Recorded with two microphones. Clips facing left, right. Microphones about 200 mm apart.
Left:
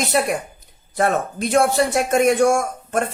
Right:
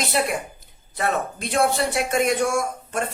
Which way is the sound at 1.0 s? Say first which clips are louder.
Left 5 dB; 45° left (ahead or behind).